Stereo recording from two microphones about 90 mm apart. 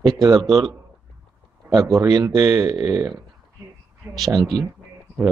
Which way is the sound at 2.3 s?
35° right (ahead or behind).